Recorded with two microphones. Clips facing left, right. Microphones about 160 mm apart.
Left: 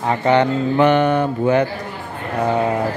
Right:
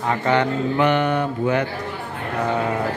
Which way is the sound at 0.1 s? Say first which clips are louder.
Left 4 dB; 25° left (ahead or behind).